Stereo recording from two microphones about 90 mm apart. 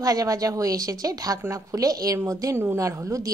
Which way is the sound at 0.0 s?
40° right (ahead or behind).